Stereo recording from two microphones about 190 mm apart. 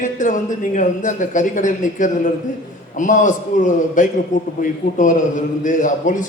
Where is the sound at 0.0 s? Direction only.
40° left (ahead or behind).